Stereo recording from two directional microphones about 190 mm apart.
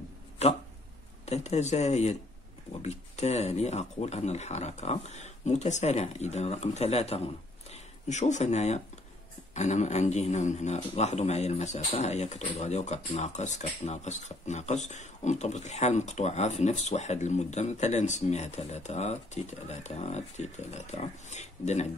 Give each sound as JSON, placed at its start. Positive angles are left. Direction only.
{"t": 0.4, "sound": "dog", "side_deg": 35}
{"t": 1.2, "sound": "a man's voice", "side_deg": 35}